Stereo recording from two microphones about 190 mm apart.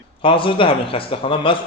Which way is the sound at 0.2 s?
25° left (ahead or behind).